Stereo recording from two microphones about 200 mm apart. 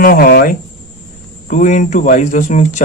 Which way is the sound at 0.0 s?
45° left (ahead or behind).